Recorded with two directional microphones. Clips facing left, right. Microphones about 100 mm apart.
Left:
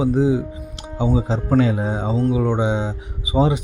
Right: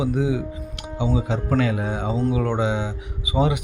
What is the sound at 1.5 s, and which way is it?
A man's voice, 25° left (ahead or behind).